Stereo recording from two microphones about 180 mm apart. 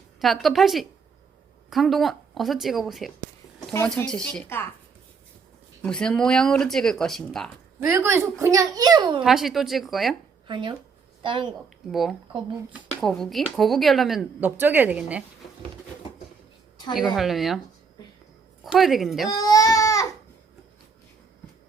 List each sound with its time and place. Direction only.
0.2 s speech: centre (ahead or behind)
5.8 s speech: 5° left (ahead or behind)
7.8 s a child's voice: 15° right (ahead or behind)
9.2 s speech: centre (ahead or behind)
10.4 s a woman's voice: 25° right (ahead or behind)
11.9 s speech: centre (ahead or behind)
17.2 s speech: centre (ahead or behind)
18.6 s speech: centre (ahead or behind)
19.3 s goat: 20° left (ahead or behind)